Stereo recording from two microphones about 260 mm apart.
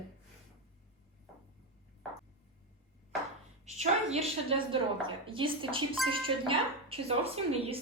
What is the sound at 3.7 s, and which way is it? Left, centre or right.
Speech, right.